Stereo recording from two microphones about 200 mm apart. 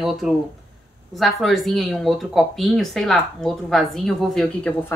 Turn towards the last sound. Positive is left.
turn(degrees=5)  # may be behind; listen again after turning